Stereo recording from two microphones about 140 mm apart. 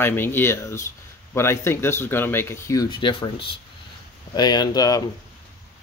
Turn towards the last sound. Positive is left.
turn(degrees=25)  # may be behind; listen again after turning